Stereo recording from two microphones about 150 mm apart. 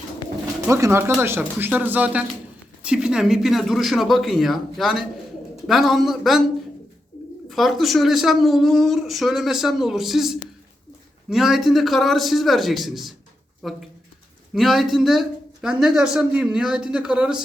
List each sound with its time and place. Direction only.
0.7 s speech: 20° right (ahead or behind); by 6.4 s centre (ahead or behind)
7.5 s speech: centre (ahead or behind)